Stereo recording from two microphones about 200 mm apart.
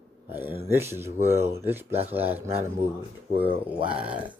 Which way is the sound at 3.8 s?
25° right (ahead or behind).